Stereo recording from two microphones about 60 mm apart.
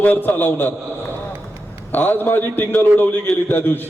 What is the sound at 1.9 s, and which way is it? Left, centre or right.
A man's voice, left.